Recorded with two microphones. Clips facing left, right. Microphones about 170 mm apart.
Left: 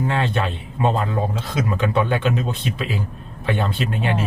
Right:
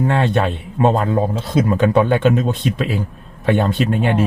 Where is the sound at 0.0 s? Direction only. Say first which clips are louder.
Right 5 dB; 45° right (ahead or behind).